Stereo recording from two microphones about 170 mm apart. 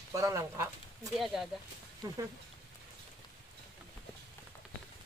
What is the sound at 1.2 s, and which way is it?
Speech, centre (ahead or behind).